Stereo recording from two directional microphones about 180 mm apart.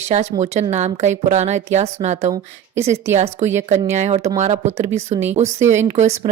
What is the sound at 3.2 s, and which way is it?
A woman's voice, 40° right (ahead or behind).